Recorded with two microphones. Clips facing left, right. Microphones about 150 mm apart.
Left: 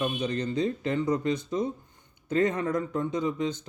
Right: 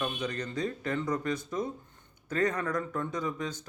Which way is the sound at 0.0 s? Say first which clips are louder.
Left 5 dB; 25° left (ahead or behind).